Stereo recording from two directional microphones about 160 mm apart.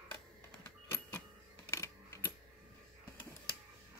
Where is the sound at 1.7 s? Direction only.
20° left (ahead or behind).